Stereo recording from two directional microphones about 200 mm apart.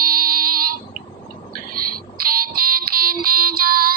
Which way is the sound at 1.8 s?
45° right (ahead or behind).